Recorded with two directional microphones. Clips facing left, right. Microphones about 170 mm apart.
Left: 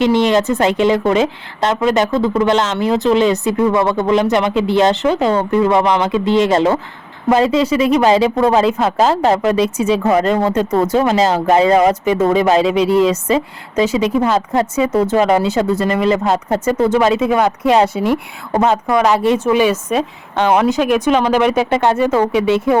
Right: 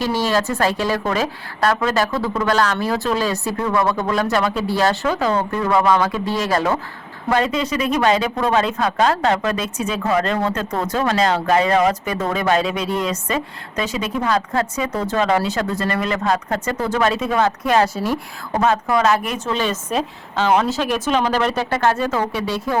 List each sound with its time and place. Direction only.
0.0 s a woman's voice: 20° left (ahead or behind)
18.9 s a woman's voice: 15° left (ahead or behind)